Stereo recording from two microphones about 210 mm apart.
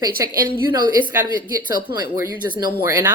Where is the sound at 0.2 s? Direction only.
15° right (ahead or behind).